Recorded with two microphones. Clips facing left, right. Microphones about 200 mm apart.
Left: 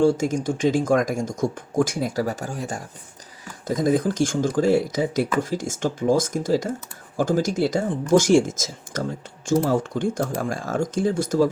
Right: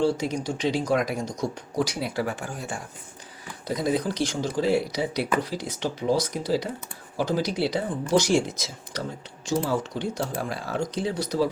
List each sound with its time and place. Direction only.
0.0 s speech: 50° left (ahead or behind)